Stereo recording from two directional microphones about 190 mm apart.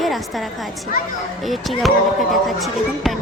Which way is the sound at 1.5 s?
Centre (ahead or behind).